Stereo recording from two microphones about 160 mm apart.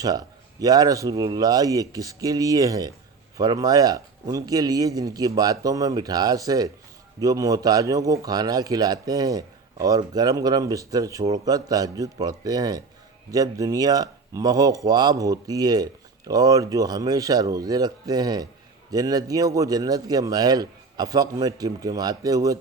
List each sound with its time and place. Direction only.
0.0 s a man's voice: 25° right (ahead or behind)